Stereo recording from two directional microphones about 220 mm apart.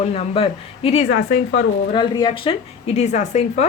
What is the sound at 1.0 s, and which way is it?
Speech, 50° left (ahead or behind).